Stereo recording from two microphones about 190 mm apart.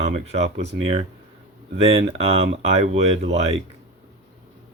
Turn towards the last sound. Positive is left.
turn(degrees=-35)  # may be behind; listen again after turning